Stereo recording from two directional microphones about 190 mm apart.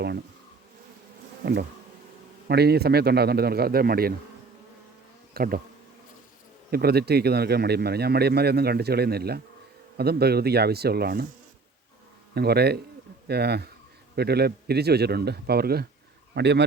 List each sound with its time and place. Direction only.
2.5 s speech: 60° right (ahead or behind)
5.3 s speech: 50° right (ahead or behind)
6.7 s speech: 55° right (ahead or behind)
12.3 s speech: 55° right (ahead or behind)